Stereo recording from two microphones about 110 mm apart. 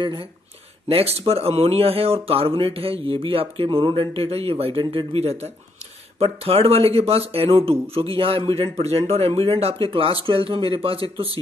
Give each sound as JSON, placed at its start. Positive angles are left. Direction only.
{"t": 0.0, "sound": "speech", "side_deg": -45}
{"t": 0.8, "sound": "speech", "side_deg": -65}